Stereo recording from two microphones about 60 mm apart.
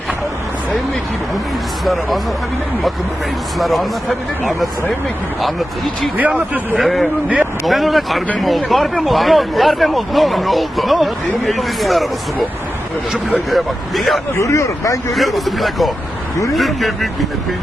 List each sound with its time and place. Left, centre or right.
1.8 s speech: centre
3.6 s speech: centre
5.4 s speech: centre
6.1 s speech: right
6.7 s speech: centre
13.5 s speech: centre
14.4 s speech: left
15.1 s speech: centre